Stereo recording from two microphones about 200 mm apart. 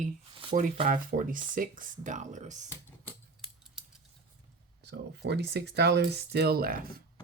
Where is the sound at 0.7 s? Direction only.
40° right (ahead or behind).